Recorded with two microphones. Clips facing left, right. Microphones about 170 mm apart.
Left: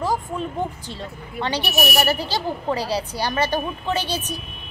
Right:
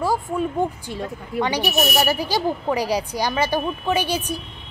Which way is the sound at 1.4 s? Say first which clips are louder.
Right 2 dB; 15° right (ahead or behind).